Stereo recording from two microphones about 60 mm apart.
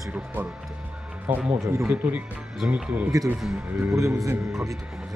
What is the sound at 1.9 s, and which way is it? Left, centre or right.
Speech, right.